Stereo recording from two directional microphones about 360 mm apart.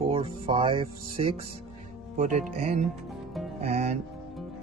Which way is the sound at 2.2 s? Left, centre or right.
Centre.